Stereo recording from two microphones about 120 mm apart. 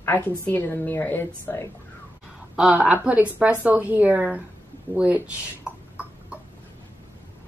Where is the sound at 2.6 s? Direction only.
10° right (ahead or behind).